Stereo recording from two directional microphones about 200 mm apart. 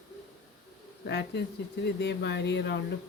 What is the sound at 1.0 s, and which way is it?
Speech, 55° left (ahead or behind).